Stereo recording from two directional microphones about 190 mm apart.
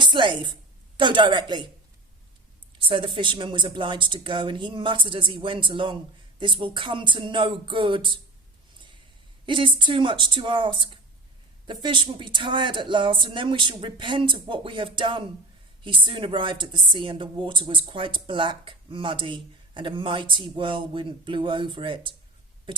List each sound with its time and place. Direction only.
0.0 s a sound: 25° right (ahead or behind)
0.9 s speech: 25° right (ahead or behind)
2.7 s speech: 25° right (ahead or behind)
9.5 s speech: 25° right (ahead or behind)